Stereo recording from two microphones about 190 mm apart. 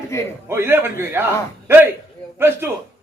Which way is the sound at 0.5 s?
10° right (ahead or behind).